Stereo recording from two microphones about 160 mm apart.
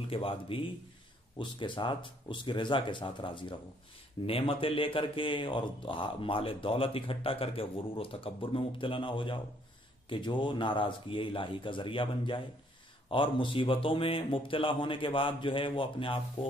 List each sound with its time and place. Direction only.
0.1 s speech: 35° left (ahead or behind)